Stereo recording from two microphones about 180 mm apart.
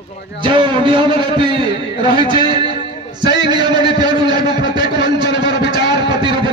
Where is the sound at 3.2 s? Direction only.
25° right (ahead or behind).